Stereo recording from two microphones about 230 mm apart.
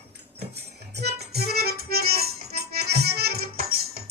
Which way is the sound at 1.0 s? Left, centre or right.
Right.